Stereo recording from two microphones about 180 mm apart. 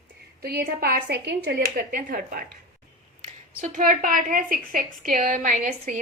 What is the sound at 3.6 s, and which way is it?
A woman's voice, 50° right (ahead or behind).